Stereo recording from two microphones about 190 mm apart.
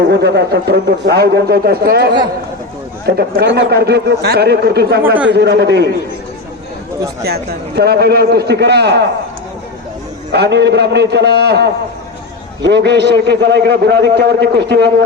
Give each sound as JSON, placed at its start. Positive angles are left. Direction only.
{"t": 0.1, "sound": "a man's voice", "side_deg": -60}
{"t": 3.2, "sound": "a man's voice", "side_deg": -60}
{"t": 7.8, "sound": "a man's voice", "side_deg": -60}
{"t": 10.3, "sound": "a man's voice", "side_deg": -65}